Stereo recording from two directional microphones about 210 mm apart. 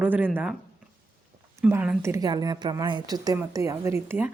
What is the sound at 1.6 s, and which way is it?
Speech, 5° right (ahead or behind).